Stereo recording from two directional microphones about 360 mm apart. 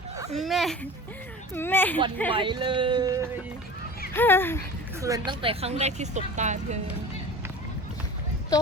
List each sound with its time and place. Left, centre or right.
0.3 s speech: centre
2.3 s speech: centre
4.1 s speech: centre
4.9 s speech: centre